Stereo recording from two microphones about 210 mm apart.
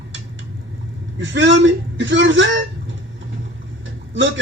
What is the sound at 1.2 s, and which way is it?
A man's voice, 60° right (ahead or behind).